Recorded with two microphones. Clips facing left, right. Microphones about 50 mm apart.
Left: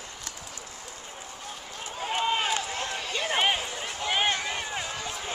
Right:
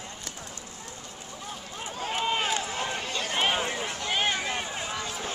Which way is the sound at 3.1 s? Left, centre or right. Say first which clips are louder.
Left 3 dB; left.